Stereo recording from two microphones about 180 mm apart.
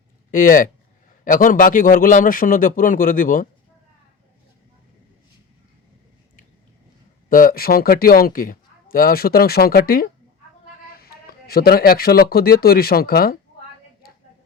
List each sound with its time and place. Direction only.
0.3 s a man's voice: 50° left (ahead or behind)
7.3 s a man's voice: 50° left (ahead or behind)